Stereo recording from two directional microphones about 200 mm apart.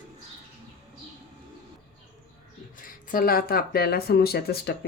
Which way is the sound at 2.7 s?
45° left (ahead or behind).